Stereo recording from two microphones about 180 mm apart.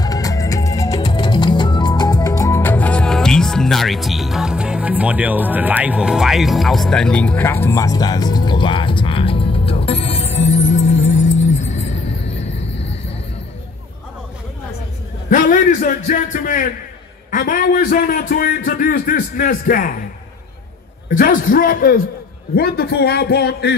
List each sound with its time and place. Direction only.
0.0 s music: 20° left (ahead or behind); by 12.0 s 40° left (ahead or behind)
15.2 s a man's voice: 45° left (ahead or behind)
21.1 s a man's voice: 50° left (ahead or behind); by 23.8 s 65° left (ahead or behind)